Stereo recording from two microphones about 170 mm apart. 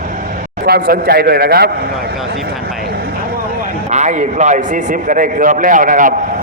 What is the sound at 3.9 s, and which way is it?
A man's voice, 45° right (ahead or behind).